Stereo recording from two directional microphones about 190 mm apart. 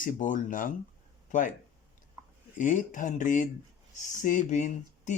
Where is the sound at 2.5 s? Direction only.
40° left (ahead or behind).